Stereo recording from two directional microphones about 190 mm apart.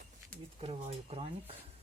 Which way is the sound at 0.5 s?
30° right (ahead or behind).